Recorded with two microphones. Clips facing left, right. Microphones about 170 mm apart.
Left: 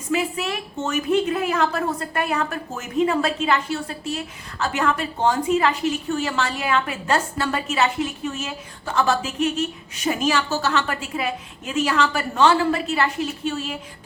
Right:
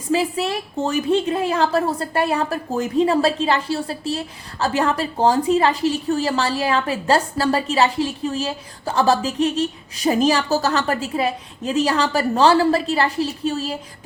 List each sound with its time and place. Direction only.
0.1 s a woman's voice: 30° right (ahead or behind)